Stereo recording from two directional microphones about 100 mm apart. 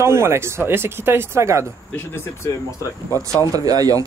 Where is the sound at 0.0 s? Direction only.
25° right (ahead or behind).